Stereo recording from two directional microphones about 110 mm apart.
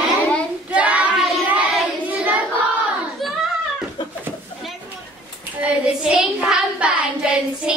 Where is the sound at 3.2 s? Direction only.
Centre (ahead or behind).